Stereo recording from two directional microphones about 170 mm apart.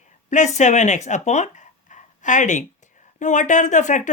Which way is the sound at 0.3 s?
45° left (ahead or behind).